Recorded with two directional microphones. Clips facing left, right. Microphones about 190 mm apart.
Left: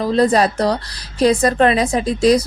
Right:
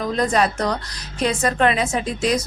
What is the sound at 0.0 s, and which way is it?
A woman's voice, 30° left (ahead or behind).